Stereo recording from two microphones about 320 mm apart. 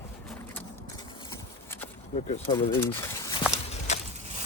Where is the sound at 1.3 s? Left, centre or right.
Centre.